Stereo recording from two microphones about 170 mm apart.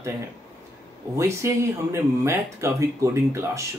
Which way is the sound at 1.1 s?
15° right (ahead or behind).